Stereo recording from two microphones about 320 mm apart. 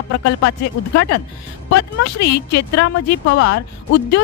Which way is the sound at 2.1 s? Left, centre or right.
Left.